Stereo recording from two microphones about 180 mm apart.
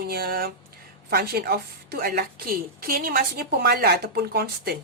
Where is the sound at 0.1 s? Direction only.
55° right (ahead or behind).